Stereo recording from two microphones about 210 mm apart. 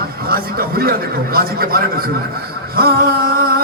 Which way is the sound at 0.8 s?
45° right (ahead or behind).